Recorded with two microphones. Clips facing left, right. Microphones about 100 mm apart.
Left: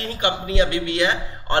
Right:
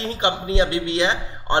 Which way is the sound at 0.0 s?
25° right (ahead or behind).